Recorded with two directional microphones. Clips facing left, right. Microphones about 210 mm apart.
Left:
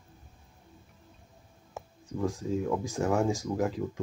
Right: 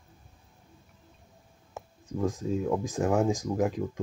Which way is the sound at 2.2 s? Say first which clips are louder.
Right 1 dB; 20° right (ahead or behind).